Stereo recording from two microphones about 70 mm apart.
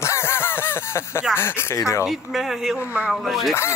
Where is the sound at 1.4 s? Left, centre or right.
Left.